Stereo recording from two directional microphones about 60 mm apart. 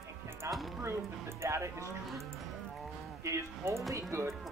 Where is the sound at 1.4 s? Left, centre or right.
Right.